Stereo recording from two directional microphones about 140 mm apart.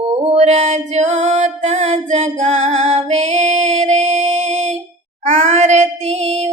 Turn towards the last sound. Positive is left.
turn(degrees=-50)  # may be behind; listen again after turning